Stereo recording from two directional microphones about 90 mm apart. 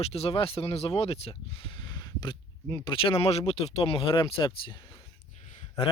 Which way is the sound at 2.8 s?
75° left (ahead or behind).